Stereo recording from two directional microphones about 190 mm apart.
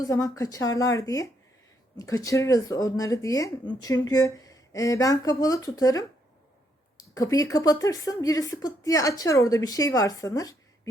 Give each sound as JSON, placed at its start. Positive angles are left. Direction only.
{"t": 0.0, "sound": "a woman's voice", "side_deg": 15}
{"t": 7.1, "sound": "a woman's voice", "side_deg": 20}